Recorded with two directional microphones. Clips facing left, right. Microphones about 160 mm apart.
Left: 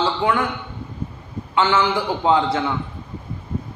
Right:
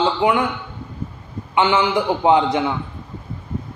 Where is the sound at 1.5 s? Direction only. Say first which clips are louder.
Right 2 dB; 15° right (ahead or behind).